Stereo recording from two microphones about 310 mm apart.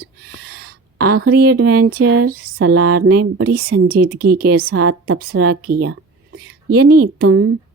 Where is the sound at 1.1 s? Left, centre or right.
Right.